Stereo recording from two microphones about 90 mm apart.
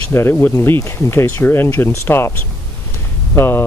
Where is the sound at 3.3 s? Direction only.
25° left (ahead or behind).